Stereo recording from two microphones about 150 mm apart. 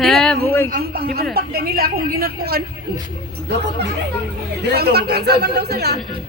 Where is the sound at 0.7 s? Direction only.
85° right.